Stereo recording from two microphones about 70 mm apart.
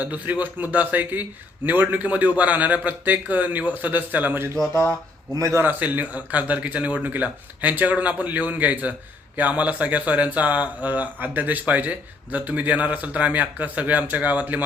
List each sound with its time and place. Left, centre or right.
0.0 s speech: right
4.7 s a sound: left
5.3 s a man's voice: right
5.6 s speech: right